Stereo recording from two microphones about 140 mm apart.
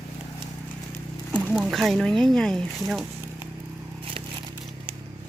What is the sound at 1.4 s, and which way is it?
Speech, 5° right (ahead or behind).